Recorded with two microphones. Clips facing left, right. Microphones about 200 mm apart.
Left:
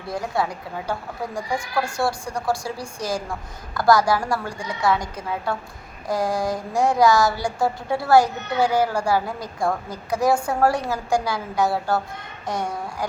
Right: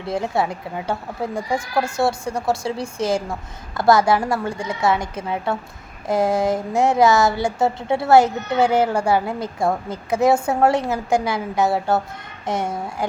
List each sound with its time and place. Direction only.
0.1 s speech: 25° right (ahead or behind)